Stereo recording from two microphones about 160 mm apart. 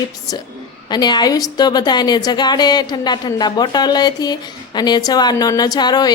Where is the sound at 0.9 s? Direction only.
25° left (ahead or behind).